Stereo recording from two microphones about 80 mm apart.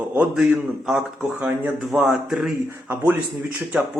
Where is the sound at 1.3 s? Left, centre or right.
Centre.